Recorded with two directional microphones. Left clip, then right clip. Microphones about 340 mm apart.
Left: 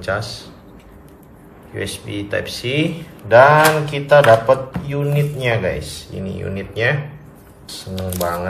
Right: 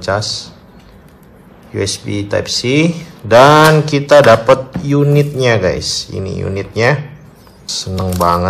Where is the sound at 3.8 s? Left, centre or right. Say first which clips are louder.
Right 4 dB; centre.